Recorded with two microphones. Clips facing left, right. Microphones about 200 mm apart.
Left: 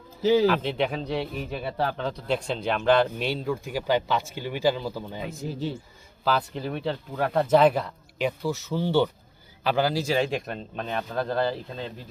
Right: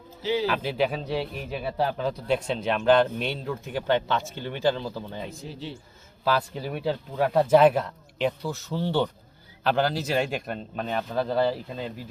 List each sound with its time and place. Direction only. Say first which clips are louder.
0.2 s speech: left 6 dB; 45° left (ahead or behind)
0.5 s a man's voice: even; 5° right (ahead or behind)
5.5 s a man's voice: left 6 dB; 45° left (ahead or behind)
6.2 s a man's voice: even; 5° right (ahead or behind)